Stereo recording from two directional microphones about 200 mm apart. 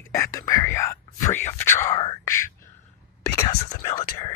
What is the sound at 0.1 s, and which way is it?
Whispering, 15° left (ahead or behind).